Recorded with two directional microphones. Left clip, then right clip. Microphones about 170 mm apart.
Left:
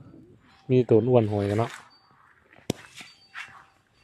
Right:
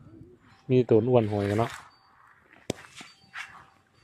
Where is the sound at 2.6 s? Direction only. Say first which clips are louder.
Left 2 dB; 45° left (ahead or behind).